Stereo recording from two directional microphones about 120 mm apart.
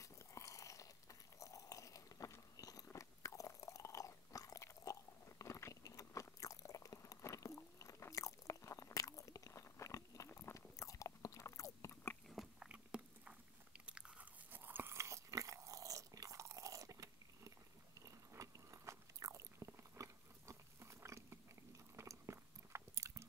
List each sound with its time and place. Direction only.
0.0 s biting: 25° left (ahead or behind)
12.3 s biting: 5° right (ahead or behind); by 23.2 s 25° right (ahead or behind)